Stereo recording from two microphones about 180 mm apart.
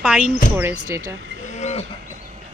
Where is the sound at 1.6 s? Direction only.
40° left (ahead or behind).